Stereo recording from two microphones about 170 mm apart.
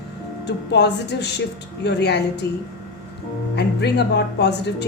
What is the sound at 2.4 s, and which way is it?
Speech, 15° left (ahead or behind).